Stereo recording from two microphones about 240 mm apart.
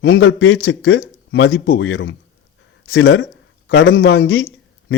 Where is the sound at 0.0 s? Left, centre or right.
Left.